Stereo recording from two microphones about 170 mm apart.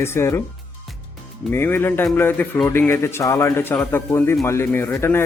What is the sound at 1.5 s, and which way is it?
A man's voice, 15° left (ahead or behind).